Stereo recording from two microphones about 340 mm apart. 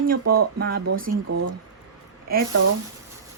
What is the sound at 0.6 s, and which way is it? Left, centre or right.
Speech, right.